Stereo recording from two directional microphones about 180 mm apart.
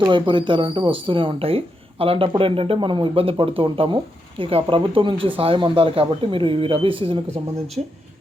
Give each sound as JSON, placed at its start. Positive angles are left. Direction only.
{"t": 0.1, "sound": "speech", "side_deg": -25}
{"t": 7.8, "sound": "speech", "side_deg": -40}